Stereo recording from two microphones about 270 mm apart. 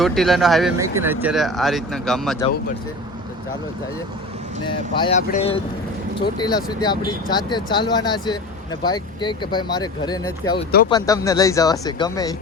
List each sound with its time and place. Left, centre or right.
0.0 s speech: centre
4.7 s speech: centre